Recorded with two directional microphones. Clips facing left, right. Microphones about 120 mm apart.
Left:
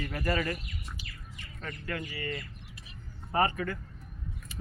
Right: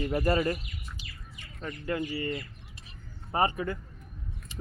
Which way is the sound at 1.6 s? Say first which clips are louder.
Right 6 dB; 20° right (ahead or behind).